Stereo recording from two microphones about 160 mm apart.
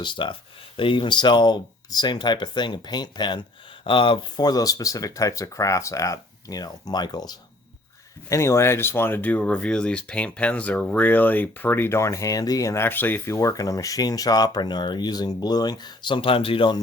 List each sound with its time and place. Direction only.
0.0 s speech: 30° left (ahead or behind)